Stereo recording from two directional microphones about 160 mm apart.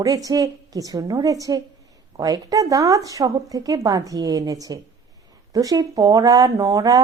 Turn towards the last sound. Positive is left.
turn(degrees=-20)  # may be behind; listen again after turning